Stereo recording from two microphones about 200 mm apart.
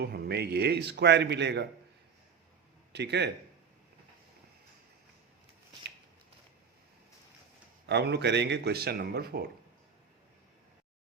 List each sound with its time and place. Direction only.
0.0 s a man's voice: 55° right (ahead or behind)
2.9 s a man's voice: 55° right (ahead or behind)
7.9 s a man's voice: 55° right (ahead or behind)